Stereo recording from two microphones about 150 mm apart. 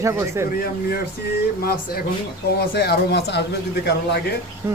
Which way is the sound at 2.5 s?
90° left.